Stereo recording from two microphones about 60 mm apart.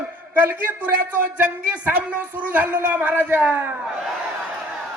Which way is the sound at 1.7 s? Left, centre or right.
Right.